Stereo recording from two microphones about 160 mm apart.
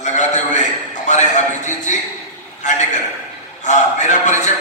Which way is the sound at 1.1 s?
45° left (ahead or behind).